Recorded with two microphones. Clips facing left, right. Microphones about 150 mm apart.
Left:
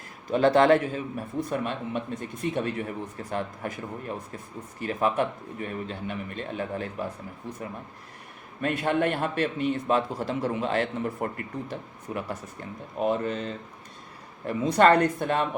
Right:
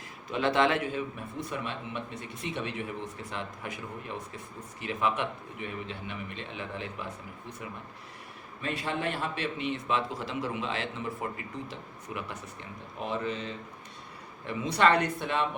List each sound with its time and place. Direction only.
0.3 s speech: 40° left (ahead or behind)
8.6 s speech: 55° left (ahead or behind)